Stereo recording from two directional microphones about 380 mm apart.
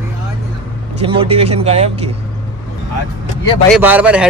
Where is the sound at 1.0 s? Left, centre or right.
Centre.